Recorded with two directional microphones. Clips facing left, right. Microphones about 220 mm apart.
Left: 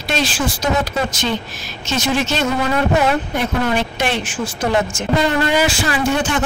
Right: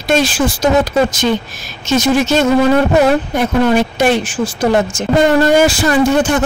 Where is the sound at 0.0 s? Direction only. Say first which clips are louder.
Right 7 dB; 45° right (ahead or behind).